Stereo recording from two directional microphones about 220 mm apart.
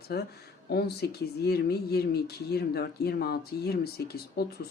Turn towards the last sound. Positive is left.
turn(degrees=45)  # may be behind; listen again after turning